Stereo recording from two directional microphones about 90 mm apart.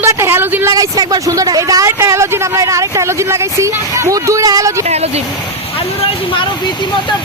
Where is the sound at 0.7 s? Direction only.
45° right (ahead or behind).